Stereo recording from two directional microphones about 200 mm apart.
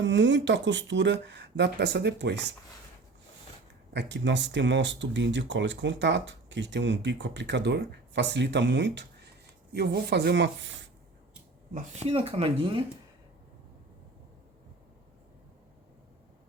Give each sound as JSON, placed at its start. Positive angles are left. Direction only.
{"t": 0.0, "sound": "speech", "side_deg": -65}
{"t": 3.9, "sound": "speech", "side_deg": -60}
{"t": 12.0, "sound": "speech", "side_deg": -30}